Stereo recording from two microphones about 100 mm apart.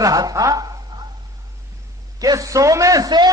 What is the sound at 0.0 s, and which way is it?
A woman's voice, 35° right (ahead or behind).